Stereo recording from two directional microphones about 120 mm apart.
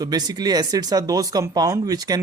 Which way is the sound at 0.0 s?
35° right (ahead or behind).